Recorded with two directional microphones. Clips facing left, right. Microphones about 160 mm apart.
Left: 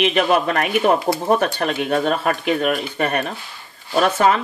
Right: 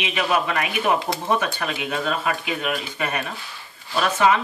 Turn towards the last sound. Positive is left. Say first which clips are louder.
# left 3 dB
turn(degrees=45)  # may be behind; listen again after turning